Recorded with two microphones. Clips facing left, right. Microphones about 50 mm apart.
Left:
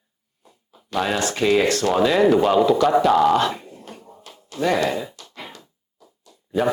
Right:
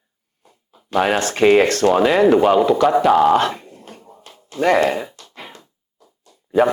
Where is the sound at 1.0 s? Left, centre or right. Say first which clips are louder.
Right 6 dB; right.